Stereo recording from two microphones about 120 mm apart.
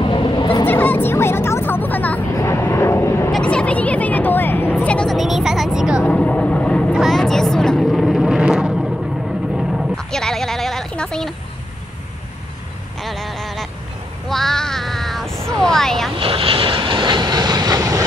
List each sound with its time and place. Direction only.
0.0 s vehicle: 45° left (ahead or behind)
0.7 s vehicle: 15° left (ahead or behind)
3.3 s a sound: 5° left (ahead or behind)
5.1 s music: centre (ahead or behind)
6.0 s vehicle: 10° left (ahead or behind)
6.9 s vehicle: centre (ahead or behind)
9.6 s a sound: 5° right (ahead or behind)
13.0 s honk: centre (ahead or behind)
14.3 s a sound: 5° left (ahead or behind)
15.6 s vehicle: 5° left (ahead or behind)
16.2 s vehicle: 50° right (ahead or behind); by 18.0 s 30° right (ahead or behind)